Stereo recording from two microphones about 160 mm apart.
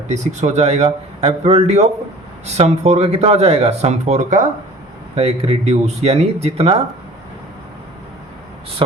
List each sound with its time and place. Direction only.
0.1 s speech: 45° right (ahead or behind)